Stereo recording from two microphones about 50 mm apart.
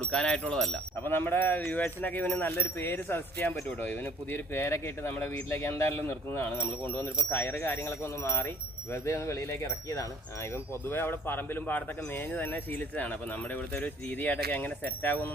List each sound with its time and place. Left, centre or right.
0.1 s speech: centre
1.0 s speech: left
2.6 s speech: left
4.5 s speech: left
6.4 s speech: left
10.5 s speech: left